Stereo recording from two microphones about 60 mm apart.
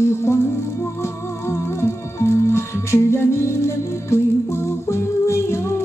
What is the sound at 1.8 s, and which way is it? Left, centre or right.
Music, left.